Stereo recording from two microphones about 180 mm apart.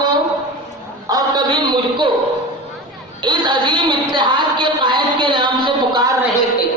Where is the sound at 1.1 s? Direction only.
20° right (ahead or behind).